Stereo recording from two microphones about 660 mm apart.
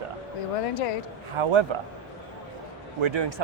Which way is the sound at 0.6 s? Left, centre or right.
Left.